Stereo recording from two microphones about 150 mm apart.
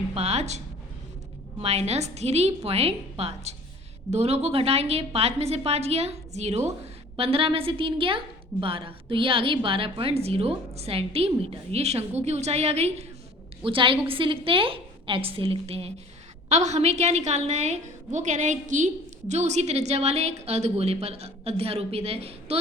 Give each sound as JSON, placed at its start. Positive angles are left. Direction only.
{"t": 0.1, "sound": "a woman's voice", "side_deg": -45}
{"t": 1.6, "sound": "a woman's voice", "side_deg": -45}